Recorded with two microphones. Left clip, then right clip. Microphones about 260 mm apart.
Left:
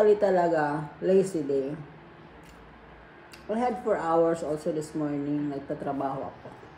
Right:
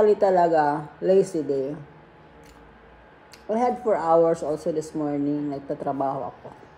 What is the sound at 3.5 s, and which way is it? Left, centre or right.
Speech, right.